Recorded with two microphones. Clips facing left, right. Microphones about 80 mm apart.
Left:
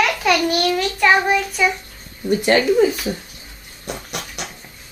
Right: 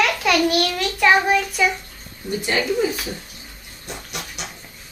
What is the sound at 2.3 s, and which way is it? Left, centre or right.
Speech, left.